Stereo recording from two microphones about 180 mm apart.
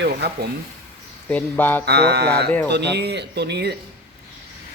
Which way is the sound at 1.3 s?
10° left (ahead or behind).